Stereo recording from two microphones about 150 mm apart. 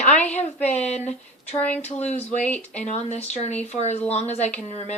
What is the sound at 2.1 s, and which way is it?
Speech, 45° left (ahead or behind).